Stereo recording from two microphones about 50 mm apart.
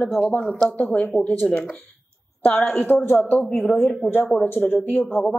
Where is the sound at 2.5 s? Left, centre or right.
Left.